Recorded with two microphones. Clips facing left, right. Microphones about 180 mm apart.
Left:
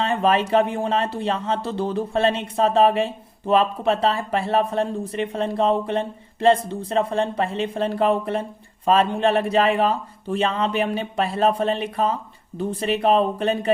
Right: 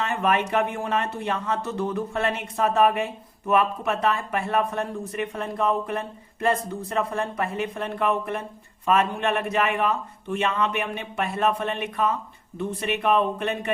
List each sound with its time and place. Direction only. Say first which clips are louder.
0.0 s speech: left 4 dB; 30° left (ahead or behind)